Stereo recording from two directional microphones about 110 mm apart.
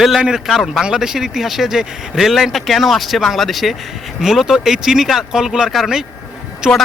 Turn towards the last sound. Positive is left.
turn(degrees=0)  # may be behind; listen again after turning